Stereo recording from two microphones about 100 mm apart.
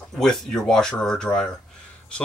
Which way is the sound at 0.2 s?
5° left (ahead or behind).